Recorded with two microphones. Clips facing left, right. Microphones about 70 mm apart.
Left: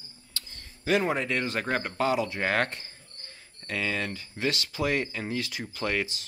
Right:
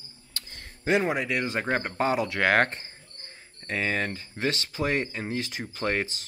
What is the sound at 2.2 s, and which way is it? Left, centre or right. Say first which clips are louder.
Speech: right 5 dB; right.